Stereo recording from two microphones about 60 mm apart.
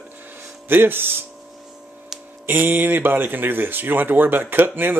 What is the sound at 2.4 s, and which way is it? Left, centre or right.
Speech, right.